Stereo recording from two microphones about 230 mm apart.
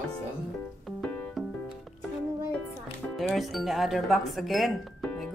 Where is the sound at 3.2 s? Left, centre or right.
Centre.